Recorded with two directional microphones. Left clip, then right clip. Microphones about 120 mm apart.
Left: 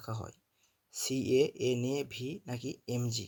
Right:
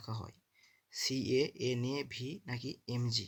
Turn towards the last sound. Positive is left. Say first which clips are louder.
# left 1 dB
turn(degrees=30)  # may be behind; listen again after turning